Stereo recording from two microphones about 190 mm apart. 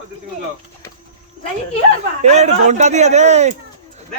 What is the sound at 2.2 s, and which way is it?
A man's voice, 35° right (ahead or behind).